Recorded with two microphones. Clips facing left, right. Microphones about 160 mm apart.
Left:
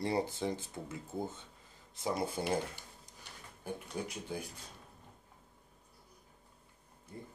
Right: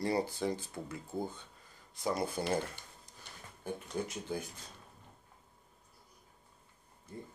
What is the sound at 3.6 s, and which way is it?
Speech, 10° left (ahead or behind).